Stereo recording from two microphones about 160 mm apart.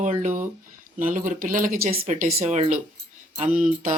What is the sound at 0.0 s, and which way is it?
Speech, 50° right (ahead or behind).